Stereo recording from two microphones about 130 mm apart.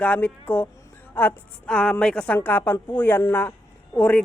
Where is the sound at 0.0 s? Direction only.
10° left (ahead or behind).